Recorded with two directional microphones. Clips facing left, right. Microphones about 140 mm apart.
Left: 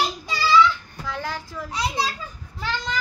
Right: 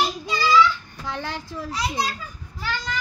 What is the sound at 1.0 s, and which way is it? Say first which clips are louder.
Speech: even; 25° right (ahead or behind).